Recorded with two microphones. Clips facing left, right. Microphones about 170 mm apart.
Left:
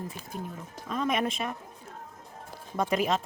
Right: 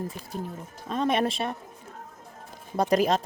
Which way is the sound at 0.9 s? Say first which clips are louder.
Right 3 dB; 30° right (ahead or behind).